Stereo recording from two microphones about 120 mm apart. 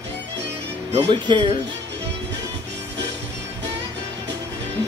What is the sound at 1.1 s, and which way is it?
Speech, 40° right (ahead or behind).